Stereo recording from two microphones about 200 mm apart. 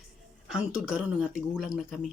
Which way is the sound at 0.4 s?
5° right (ahead or behind).